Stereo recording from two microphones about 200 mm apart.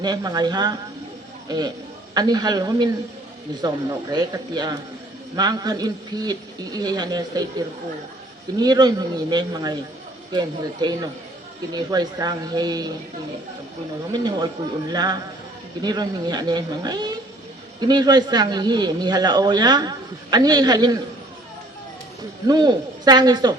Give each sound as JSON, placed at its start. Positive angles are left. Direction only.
{"t": 0.0, "sound": "speech", "side_deg": -20}
{"t": 8.5, "sound": "speech", "side_deg": -20}
{"t": 14.1, "sound": "speech", "side_deg": -20}
{"t": 22.4, "sound": "speech", "side_deg": -20}